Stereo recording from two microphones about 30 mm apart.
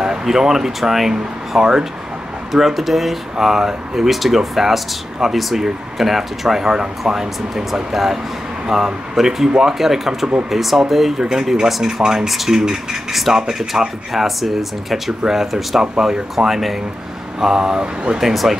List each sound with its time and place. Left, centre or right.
0.2 s speech: centre
2.5 s speech: centre
6.6 s speech: right
8.6 s speech: right
11.1 s speech: right
12.3 s speech: centre
13.3 s speech: centre
13.6 s speech: centre; by 17.8 s right
18.2 s speech: centre